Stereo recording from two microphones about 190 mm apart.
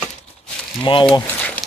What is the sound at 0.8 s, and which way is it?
Speech, 25° left (ahead or behind).